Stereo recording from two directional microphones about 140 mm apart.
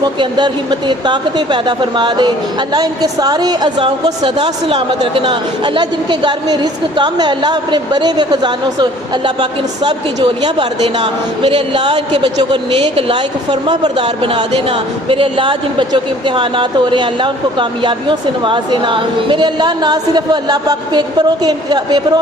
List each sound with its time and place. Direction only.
0.0 s speech: 35° right (ahead or behind)